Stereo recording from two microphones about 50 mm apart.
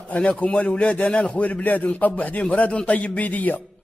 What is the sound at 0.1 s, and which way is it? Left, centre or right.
A man's voice, left.